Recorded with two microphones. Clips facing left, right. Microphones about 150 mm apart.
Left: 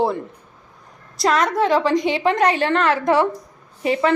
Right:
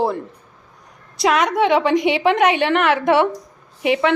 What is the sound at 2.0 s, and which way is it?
Speech, 75° right (ahead or behind).